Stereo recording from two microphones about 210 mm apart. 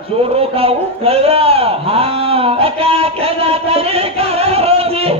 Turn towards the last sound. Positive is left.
turn(degrees=-30)  # may be behind; listen again after turning